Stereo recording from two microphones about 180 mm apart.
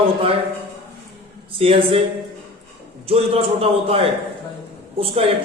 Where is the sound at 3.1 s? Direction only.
35° right (ahead or behind).